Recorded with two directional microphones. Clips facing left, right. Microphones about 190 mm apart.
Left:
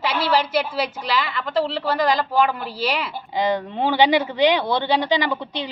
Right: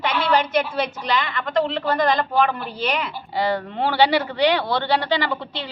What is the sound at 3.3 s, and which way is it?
A woman's voice, 20° left (ahead or behind).